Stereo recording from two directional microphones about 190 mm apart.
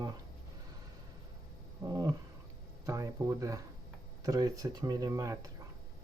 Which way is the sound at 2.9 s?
15° right (ahead or behind).